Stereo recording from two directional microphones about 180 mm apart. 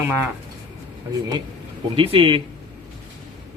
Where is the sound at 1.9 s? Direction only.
30° right (ahead or behind).